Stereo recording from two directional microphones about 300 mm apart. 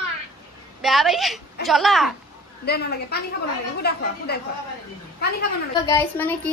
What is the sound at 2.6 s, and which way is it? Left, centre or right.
A woman's voice, left.